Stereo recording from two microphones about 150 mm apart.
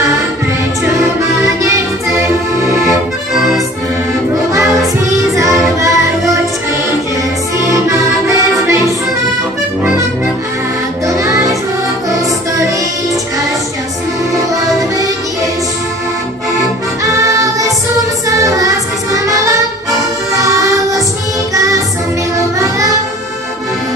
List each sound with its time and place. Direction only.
0.9 s music: 20° right (ahead or behind)
3.3 s accordion: centre (ahead or behind)
5.3 s music: 20° right (ahead or behind)
7.6 s accordion: 20° right (ahead or behind)
11.1 s music: 20° right (ahead or behind)
17.2 s music: 20° right (ahead or behind)